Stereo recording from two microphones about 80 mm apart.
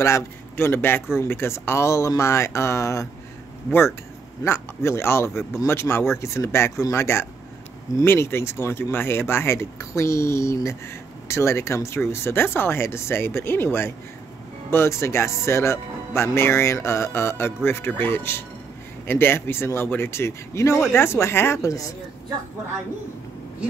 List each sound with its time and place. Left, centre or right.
0.0 s a man's voice: left
4.5 s a man's voice: left